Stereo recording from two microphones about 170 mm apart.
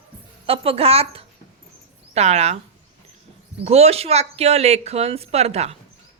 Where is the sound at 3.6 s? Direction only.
40° right (ahead or behind).